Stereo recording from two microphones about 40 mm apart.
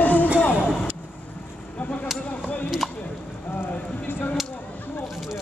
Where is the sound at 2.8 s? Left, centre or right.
Centre.